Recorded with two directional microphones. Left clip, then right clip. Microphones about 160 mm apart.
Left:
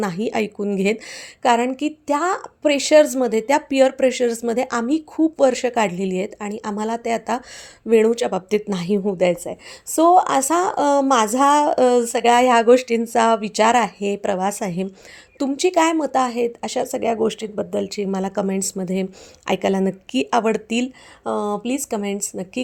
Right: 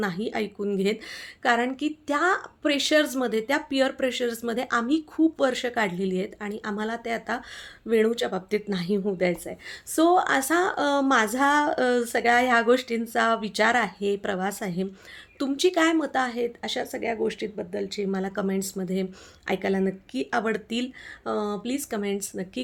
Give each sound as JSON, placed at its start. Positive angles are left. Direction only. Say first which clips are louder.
{"t": 0.0, "sound": "a woman's voice", "louder": "left 6 dB", "side_deg": 45}
{"t": 15.4, "sound": "a woman's voice", "louder": "left 5 dB", "side_deg": 35}